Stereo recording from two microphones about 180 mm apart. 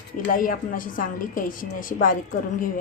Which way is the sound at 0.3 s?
50° left (ahead or behind).